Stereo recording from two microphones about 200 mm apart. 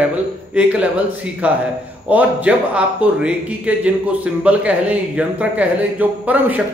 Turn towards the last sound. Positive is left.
turn(degrees=-10)  # may be behind; listen again after turning